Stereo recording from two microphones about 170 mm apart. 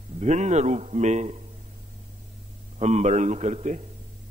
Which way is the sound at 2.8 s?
40° right (ahead or behind).